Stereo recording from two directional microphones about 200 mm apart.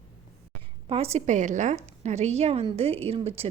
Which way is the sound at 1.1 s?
35° right (ahead or behind).